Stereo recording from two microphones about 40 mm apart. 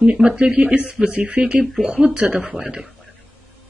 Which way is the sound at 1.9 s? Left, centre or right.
Right.